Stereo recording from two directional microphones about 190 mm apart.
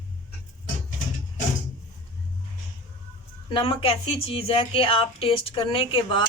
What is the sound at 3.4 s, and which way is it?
Speech, 25° left (ahead or behind).